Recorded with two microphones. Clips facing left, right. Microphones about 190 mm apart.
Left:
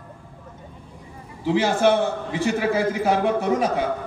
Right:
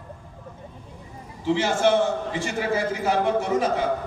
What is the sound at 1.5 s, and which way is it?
A man's voice, 60° left (ahead or behind).